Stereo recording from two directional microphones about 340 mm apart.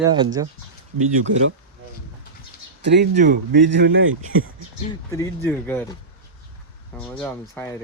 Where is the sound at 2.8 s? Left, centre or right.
Right.